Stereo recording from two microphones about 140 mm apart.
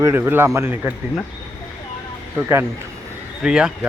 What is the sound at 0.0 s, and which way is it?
Speech, 15° right (ahead or behind).